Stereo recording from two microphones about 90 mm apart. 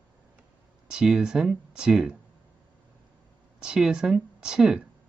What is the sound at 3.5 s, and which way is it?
Speech, 10° right (ahead or behind).